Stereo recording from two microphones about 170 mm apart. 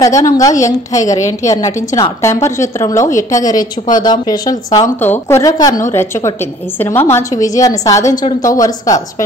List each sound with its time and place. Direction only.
0.0 s a woman's voice: 20° left (ahead or behind)